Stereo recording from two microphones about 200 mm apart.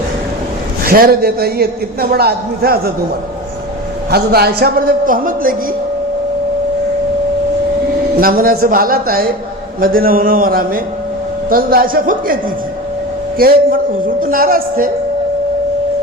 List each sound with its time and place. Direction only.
0.9 s a man's voice: 50° right (ahead or behind)
4.1 s a man's voice: 50° right (ahead or behind)
8.2 s a man's voice: 45° right (ahead or behind)
13.4 s a man's voice: 45° right (ahead or behind)